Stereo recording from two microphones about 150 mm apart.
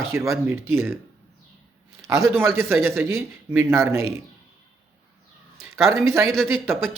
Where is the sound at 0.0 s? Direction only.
20° right (ahead or behind).